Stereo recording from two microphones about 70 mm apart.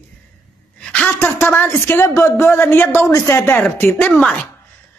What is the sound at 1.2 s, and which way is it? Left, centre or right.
A woman's voice, left.